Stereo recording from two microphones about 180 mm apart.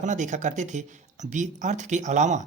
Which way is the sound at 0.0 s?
45° right (ahead or behind).